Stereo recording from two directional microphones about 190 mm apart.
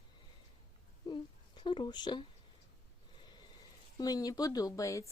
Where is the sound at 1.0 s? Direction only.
25° left (ahead or behind).